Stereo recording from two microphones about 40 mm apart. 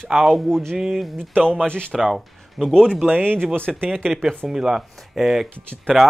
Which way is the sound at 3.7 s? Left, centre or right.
Centre.